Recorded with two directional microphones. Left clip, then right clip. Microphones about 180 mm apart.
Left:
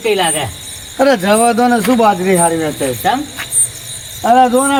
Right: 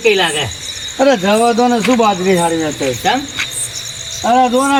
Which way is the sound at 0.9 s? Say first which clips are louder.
Left 1 dB; 10° right (ahead or behind).